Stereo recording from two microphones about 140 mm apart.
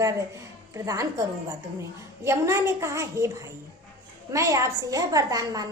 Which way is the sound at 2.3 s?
20° right (ahead or behind).